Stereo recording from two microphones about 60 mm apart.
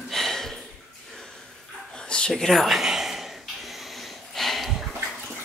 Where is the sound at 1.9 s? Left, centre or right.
Centre.